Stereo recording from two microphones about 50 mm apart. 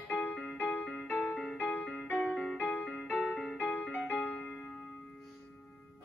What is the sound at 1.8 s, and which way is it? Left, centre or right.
Music, left.